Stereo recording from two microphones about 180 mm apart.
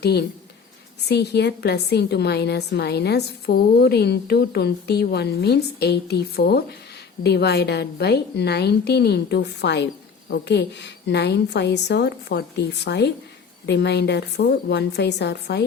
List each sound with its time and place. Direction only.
0.0 s a woman's voice: 65° left (ahead or behind)